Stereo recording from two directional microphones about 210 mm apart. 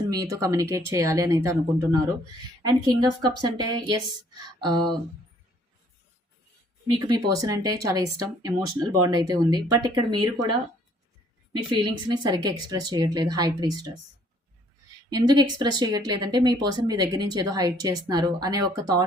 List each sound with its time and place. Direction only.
0.1 s speech: 15° right (ahead or behind)
7.1 s speech: 15° right (ahead or behind)
11.5 s speech: 20° right (ahead or behind)
15.1 s speech: 20° right (ahead or behind)